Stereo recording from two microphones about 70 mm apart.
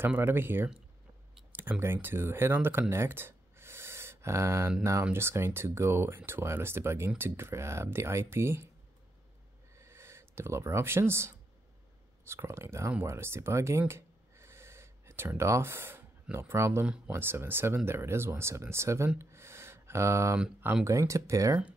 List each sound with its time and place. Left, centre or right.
0.0 s speech: right
2.9 s a sound: right
5.1 s speech: right
9.8 s speech: right
19.0 s a sound: right
20.8 s speech: right